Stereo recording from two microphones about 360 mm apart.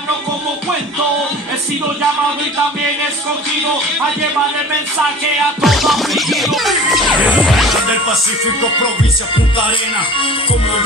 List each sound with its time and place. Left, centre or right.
5.6 s music: centre
9.7 s music: centre